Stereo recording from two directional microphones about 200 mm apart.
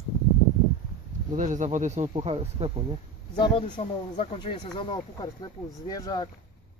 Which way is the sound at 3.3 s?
25° left (ahead or behind).